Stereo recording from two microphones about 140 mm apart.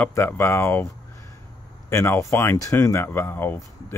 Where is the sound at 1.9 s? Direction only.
20° left (ahead or behind).